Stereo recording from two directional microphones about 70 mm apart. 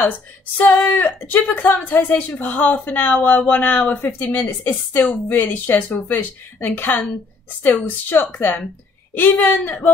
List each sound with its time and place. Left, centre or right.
0.6 s speech: left